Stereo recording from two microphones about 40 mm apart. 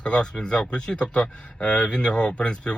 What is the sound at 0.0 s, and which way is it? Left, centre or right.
A man's voice, left.